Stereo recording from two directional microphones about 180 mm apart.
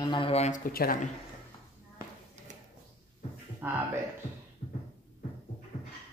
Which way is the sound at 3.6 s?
10° right (ahead or behind).